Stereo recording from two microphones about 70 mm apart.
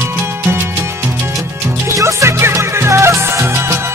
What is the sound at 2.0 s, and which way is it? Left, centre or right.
Music, right.